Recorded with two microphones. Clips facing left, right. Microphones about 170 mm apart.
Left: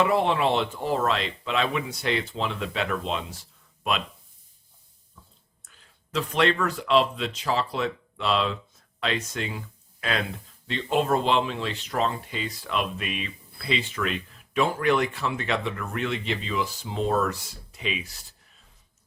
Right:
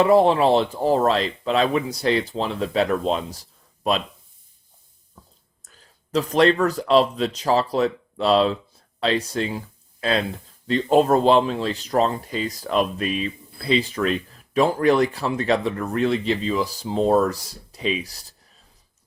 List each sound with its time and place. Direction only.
0.0 s speech: 35° right (ahead or behind)
5.2 s a sound: 40° right (ahead or behind)
5.6 s speech: 40° right (ahead or behind)